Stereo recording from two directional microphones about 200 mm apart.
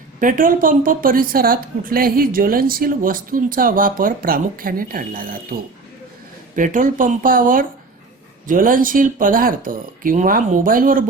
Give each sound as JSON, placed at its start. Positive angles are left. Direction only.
{"t": 0.2, "sound": "a woman's voice", "side_deg": -40}
{"t": 6.6, "sound": "a woman's voice", "side_deg": -40}